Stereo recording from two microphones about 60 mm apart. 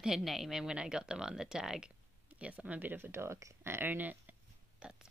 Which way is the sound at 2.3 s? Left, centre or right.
Right.